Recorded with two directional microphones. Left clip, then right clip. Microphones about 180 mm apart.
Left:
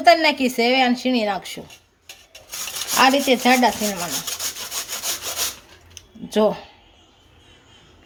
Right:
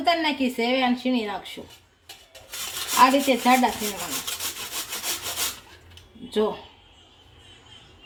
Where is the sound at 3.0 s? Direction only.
55° left (ahead or behind).